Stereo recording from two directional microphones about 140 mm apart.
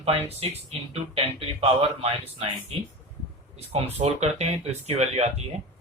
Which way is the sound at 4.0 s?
50° right (ahead or behind).